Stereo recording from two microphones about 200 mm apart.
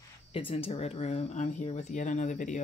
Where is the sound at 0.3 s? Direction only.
25° left (ahead or behind).